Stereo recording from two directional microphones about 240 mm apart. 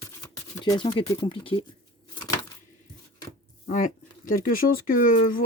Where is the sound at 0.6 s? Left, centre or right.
Centre.